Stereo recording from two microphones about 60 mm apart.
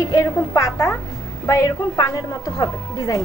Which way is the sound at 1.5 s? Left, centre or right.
Left.